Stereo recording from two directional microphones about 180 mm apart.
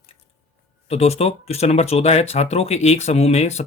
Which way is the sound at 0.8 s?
35° left (ahead or behind).